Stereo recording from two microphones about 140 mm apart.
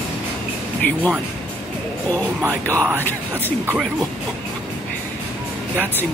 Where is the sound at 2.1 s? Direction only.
20° right (ahead or behind).